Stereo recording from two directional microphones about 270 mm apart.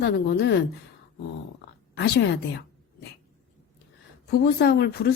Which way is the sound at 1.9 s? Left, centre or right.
Left.